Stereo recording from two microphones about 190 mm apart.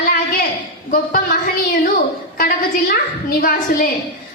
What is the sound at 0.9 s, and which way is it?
A woman's voice, 50° left (ahead or behind).